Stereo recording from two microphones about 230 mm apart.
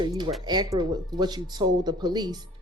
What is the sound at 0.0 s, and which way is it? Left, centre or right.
Speech, centre.